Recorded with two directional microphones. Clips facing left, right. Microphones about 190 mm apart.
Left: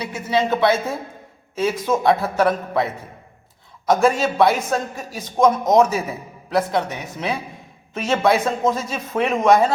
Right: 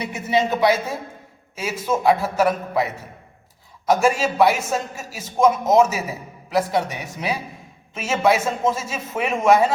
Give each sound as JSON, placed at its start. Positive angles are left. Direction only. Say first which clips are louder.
{"t": 0.0, "sound": "a man's voice", "louder": "even", "side_deg": -15}
{"t": 3.8, "sound": "a man's voice", "louder": "left 1 dB", "side_deg": -10}